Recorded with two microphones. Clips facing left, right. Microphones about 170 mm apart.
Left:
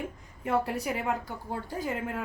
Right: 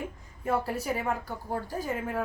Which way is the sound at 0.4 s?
20° left (ahead or behind).